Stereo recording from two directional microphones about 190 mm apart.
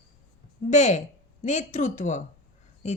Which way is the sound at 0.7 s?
40° left (ahead or behind).